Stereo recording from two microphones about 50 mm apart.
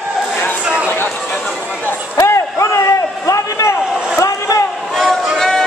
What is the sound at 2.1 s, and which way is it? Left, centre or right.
Basketball bounce, left.